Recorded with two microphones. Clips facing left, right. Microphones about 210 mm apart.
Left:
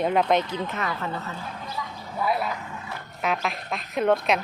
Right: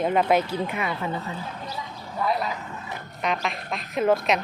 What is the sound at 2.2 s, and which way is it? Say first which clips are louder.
A woman's voice: even; 5° left (ahead or behind).